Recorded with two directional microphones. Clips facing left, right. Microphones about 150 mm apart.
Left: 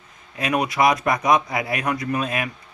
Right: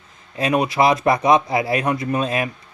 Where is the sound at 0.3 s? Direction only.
25° right (ahead or behind).